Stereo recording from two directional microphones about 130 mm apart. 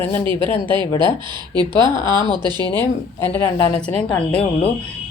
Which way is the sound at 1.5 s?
35° right (ahead or behind).